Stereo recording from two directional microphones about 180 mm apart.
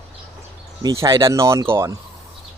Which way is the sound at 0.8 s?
15° right (ahead or behind).